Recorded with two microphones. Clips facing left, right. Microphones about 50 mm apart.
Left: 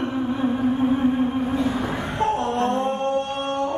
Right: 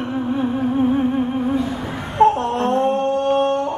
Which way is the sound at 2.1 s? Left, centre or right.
Right.